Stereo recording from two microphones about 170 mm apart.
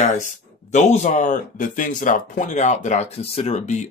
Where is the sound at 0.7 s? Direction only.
45° left (ahead or behind).